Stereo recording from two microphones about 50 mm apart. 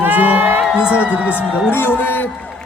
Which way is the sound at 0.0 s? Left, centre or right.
Right.